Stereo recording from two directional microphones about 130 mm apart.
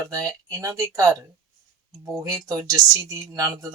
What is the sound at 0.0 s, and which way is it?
Speech, 25° right (ahead or behind).